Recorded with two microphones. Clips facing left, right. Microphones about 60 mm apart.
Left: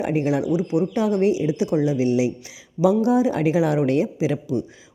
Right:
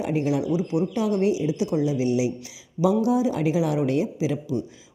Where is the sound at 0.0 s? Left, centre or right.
Left.